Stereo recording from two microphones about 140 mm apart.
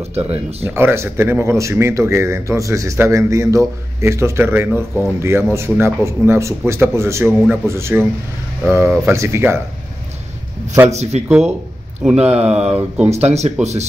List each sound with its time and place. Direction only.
0.0 s speech: 45° right (ahead or behind)
0.7 s speech: 15° right (ahead or behind)
10.9 s speech: 50° right (ahead or behind)
11.2 s speech: 10° right (ahead or behind)
13.1 s speech: 50° right (ahead or behind)